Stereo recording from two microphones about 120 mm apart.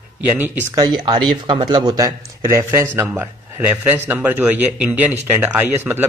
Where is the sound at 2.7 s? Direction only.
20° right (ahead or behind).